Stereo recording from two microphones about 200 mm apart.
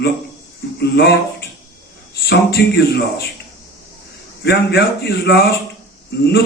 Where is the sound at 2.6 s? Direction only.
55° left (ahead or behind).